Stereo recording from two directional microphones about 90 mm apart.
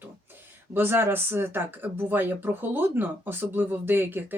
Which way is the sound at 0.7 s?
25° right (ahead or behind).